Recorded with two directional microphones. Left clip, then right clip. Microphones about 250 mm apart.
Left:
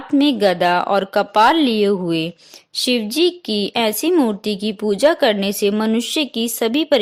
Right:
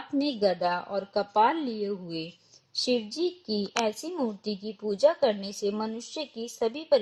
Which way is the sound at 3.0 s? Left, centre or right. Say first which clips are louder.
Left 13 dB; left.